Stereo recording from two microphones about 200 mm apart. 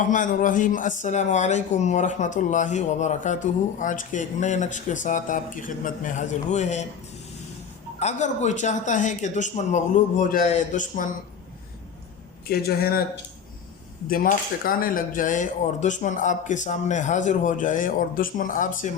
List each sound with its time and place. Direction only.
0.0 s speech: 40° left (ahead or behind)
7.9 s speech: 35° left (ahead or behind)
12.5 s speech: 50° left (ahead or behind)
14.1 s speech: 45° left (ahead or behind)